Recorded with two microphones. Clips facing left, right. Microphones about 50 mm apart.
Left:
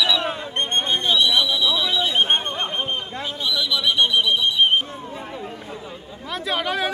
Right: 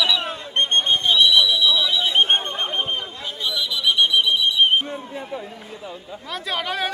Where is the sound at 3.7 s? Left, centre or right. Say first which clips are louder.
Right 1 dB; left.